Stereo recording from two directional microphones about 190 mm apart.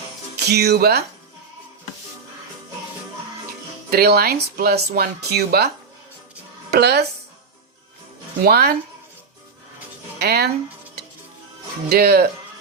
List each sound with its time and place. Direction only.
0.3 s speech: 60° right (ahead or behind)
3.8 s speech: 55° right (ahead or behind)
6.7 s speech: 60° right (ahead or behind)
8.4 s speech: 55° right (ahead or behind)
10.2 s speech: 55° right (ahead or behind)
11.9 s speech: 55° right (ahead or behind)